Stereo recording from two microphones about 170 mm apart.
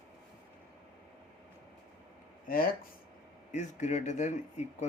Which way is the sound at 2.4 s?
55° left (ahead or behind).